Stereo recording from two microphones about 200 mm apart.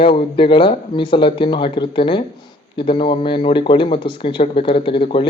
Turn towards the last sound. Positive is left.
turn(degrees=25)  # may be behind; listen again after turning